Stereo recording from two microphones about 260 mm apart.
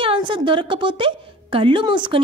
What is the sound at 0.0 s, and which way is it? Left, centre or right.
A woman's voice, centre.